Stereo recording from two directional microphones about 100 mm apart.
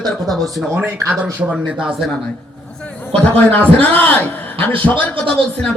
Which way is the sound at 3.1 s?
15° left (ahead or behind).